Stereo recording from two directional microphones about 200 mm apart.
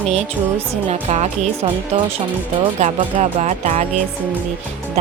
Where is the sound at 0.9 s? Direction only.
30° right (ahead or behind).